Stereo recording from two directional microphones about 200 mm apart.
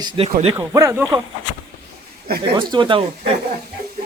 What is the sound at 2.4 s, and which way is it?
Speech, 25° right (ahead or behind).